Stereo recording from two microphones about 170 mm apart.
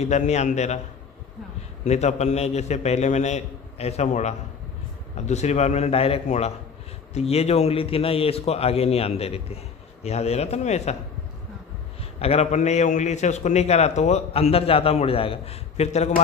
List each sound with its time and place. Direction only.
0.0 s a man's voice: 40° left (ahead or behind)
1.9 s a man's voice: 40° left (ahead or behind)
12.0 s a man's voice: 35° left (ahead or behind)